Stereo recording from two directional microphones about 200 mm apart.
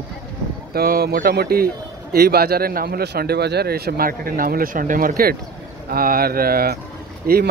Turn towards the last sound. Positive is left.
turn(degrees=-50)  # may be behind; listen again after turning